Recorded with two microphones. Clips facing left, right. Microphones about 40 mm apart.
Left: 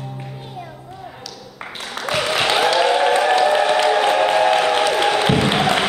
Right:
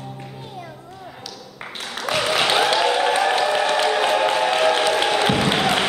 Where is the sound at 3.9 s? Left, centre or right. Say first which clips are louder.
Left 3 dB; centre.